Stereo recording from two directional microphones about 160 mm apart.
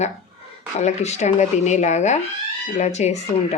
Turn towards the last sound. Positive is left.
turn(degrees=45)  # may be behind; listen again after turning